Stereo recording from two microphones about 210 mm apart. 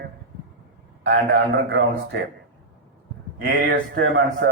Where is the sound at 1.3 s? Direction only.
55° right (ahead or behind).